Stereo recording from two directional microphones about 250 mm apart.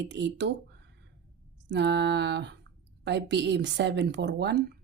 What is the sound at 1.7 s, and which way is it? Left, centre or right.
Speech, right.